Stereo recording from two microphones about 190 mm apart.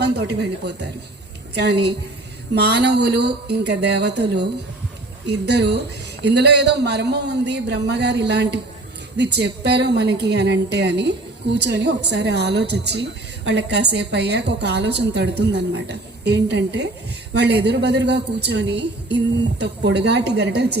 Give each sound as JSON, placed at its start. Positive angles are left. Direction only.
{"t": 0.0, "sound": "a woman's voice", "side_deg": -60}